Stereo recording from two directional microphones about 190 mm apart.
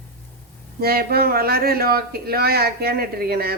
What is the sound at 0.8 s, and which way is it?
Speech, 55° right (ahead or behind).